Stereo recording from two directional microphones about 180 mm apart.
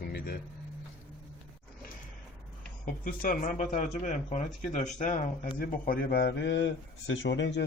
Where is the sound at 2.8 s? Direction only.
50° left (ahead or behind).